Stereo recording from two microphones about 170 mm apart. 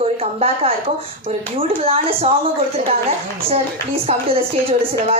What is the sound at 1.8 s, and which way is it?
Speech, 35° right (ahead or behind).